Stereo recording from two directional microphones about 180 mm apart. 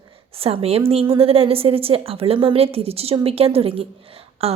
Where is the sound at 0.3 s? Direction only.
35° right (ahead or behind).